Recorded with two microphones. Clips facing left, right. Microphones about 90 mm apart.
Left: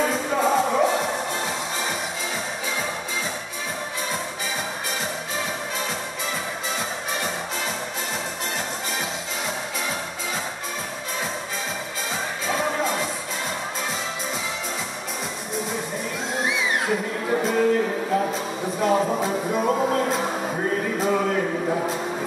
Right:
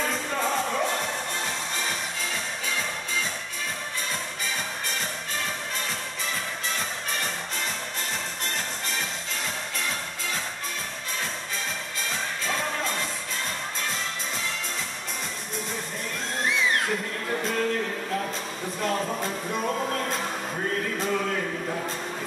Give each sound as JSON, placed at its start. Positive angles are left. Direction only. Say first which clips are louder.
{"t": 0.0, "sound": "music", "louder": "left 6 dB", "side_deg": 5}
{"t": 12.4, "sound": "music", "louder": "left 6 dB", "side_deg": 5}
{"t": 16.3, "sound": "music", "louder": "even", "side_deg": 5}